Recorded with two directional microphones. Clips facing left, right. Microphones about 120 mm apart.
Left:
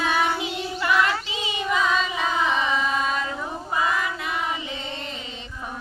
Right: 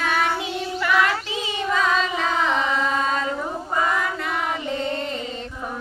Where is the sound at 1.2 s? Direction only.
15° left (ahead or behind).